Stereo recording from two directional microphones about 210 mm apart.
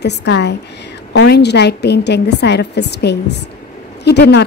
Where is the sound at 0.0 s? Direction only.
55° left (ahead or behind).